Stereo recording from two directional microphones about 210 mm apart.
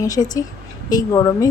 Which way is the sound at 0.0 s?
15° left (ahead or behind).